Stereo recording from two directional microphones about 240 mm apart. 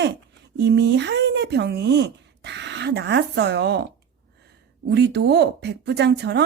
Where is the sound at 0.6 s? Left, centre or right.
Right.